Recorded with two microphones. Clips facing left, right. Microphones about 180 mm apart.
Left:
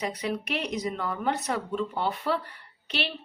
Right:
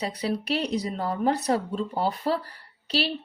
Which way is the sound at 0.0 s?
35° right (ahead or behind).